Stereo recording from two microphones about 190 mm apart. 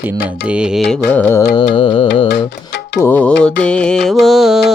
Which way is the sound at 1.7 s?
30° left (ahead or behind).